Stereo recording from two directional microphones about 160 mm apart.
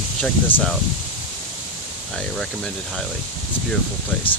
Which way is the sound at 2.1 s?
5° left (ahead or behind).